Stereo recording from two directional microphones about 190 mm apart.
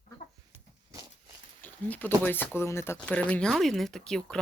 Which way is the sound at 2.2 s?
10° left (ahead or behind).